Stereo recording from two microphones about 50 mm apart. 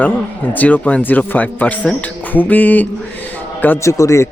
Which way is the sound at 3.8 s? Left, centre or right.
Left.